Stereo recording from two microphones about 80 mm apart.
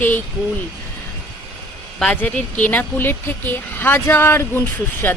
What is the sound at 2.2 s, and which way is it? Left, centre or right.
Speech, centre.